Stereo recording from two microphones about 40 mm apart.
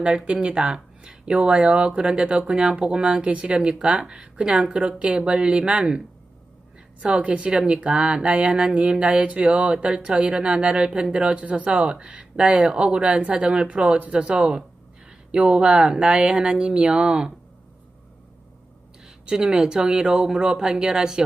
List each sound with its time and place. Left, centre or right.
0.4 s speech: right
7.0 s speech: right
19.0 s speech: right